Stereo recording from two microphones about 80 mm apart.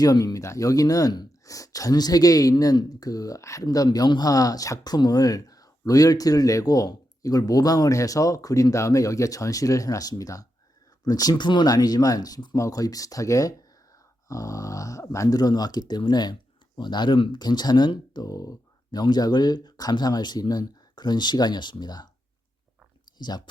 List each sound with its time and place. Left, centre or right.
0.0 s speech: left
12.5 s speech: left
23.1 s speech: left